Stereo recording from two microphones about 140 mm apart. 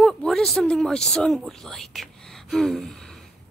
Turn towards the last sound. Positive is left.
turn(degrees=5)  # may be behind; listen again after turning